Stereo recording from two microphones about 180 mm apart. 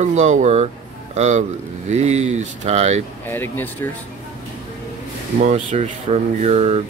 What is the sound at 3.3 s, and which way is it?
Speech, 10° left (ahead or behind).